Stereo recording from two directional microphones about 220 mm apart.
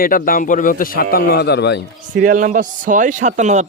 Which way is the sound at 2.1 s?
35° right (ahead or behind).